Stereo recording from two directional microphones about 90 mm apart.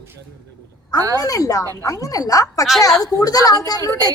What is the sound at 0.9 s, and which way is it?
Speech, 40° right (ahead or behind).